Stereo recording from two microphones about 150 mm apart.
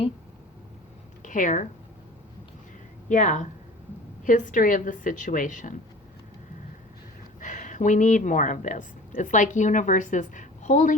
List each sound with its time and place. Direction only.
1.2 s speech: 60° left (ahead or behind)
3.1 s a woman's voice: 55° left (ahead or behind)
7.3 s speech: 55° left (ahead or behind)